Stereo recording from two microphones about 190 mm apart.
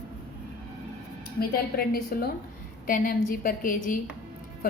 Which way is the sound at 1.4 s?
50° left (ahead or behind).